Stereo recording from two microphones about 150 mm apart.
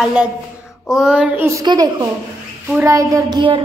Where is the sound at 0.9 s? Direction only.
5° right (ahead or behind).